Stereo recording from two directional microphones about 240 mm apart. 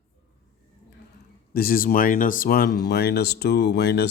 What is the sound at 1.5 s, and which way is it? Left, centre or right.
Speech, left.